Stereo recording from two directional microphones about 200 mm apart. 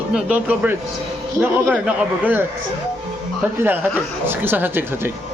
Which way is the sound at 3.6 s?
10° right (ahead or behind).